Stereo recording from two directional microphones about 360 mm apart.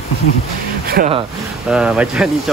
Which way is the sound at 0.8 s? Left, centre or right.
Right.